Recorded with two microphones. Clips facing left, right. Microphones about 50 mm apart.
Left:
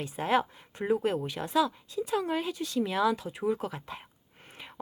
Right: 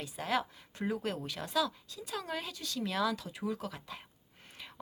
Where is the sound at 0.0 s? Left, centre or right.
Left.